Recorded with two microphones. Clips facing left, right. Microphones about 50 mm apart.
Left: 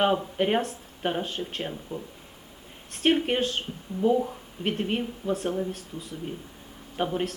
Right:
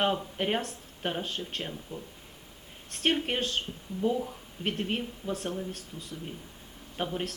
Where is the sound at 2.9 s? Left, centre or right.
Centre.